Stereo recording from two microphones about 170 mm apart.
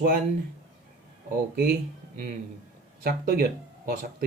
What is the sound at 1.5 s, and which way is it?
Speech, 65° right (ahead or behind).